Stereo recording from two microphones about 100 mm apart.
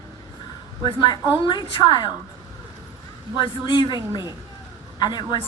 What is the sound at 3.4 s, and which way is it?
Speech, 55° left (ahead or behind).